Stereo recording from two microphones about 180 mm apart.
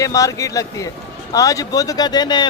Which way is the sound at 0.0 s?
20° left (ahead or behind).